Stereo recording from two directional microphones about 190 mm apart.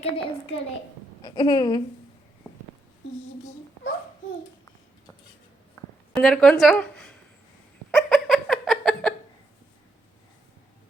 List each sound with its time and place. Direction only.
0.0 s a child's voice: 30° left (ahead or behind)
1.2 s a woman's voice: 20° left (ahead or behind)
6.1 s a woman's voice: centre (ahead or behind)
7.9 s a sound: centre (ahead or behind)